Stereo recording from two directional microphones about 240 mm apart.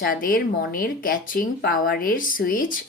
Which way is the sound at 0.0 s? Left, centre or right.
Left.